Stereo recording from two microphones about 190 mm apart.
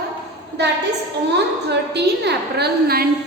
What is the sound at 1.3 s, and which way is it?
A woman's voice, 65° right (ahead or behind).